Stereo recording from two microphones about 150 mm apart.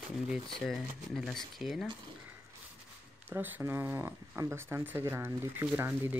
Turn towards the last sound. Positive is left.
turn(degrees=-15)  # may be behind; listen again after turning